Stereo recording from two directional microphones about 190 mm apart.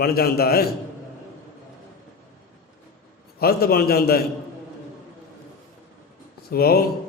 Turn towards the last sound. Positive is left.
turn(degrees=55)  # may be behind; listen again after turning